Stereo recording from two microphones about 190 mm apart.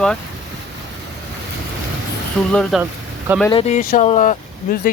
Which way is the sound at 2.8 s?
10° right (ahead or behind).